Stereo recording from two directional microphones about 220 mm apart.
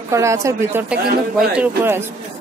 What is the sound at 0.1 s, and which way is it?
A woman's voice, 15° right (ahead or behind).